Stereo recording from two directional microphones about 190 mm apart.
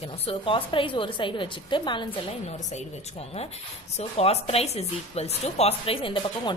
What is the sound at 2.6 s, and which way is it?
A woman's voice, 35° left (ahead or behind).